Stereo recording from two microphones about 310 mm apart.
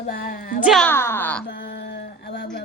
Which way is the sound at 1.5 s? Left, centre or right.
Left.